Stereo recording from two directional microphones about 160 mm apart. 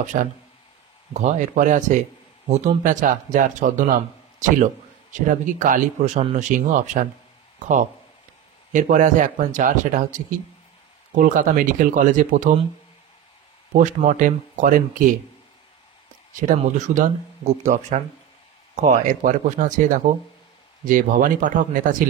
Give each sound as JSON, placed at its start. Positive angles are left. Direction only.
{"t": 0.0, "sound": "a man's voice", "side_deg": -50}
{"t": 13.7, "sound": "speech", "side_deg": -55}
{"t": 16.3, "sound": "a man's voice", "side_deg": -50}